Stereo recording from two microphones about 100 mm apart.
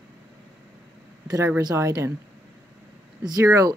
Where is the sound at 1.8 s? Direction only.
30° right (ahead or behind).